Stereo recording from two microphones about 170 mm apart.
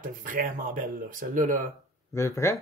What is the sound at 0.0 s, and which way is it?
Speech, 55° right (ahead or behind).